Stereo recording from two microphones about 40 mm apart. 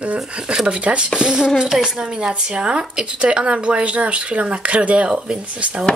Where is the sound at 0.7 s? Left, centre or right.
Right.